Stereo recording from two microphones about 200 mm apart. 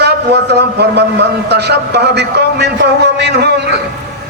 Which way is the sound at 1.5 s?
55° right (ahead or behind).